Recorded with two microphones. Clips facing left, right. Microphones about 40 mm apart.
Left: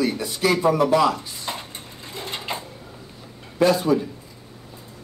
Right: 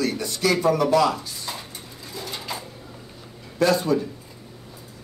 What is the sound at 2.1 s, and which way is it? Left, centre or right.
Sewing machine, left.